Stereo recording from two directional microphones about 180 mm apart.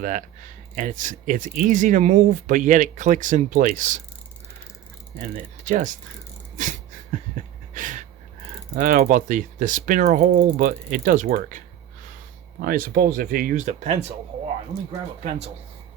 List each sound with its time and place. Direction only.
0.0 s speech: 45° right (ahead or behind)
5.6 s speech: 45° right (ahead or behind)
6.6 s a sound: 45° right (ahead or behind)
8.7 s speech: 45° right (ahead or behind)
12.6 s speech: 55° right (ahead or behind); by 14.0 s 40° right (ahead or behind)
15.2 s speech: 35° right (ahead or behind)